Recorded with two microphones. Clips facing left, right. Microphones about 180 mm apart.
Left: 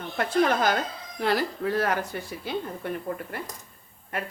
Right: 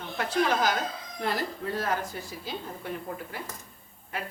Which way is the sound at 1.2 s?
75° left (ahead or behind).